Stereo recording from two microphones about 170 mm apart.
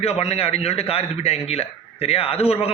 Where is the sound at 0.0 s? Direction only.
35° left (ahead or behind).